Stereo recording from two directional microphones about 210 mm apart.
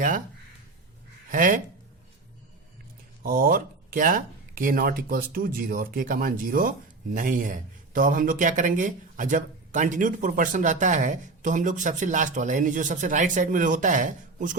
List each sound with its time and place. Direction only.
1.3 s speech: 40° right (ahead or behind)
3.2 s speech: 45° right (ahead or behind)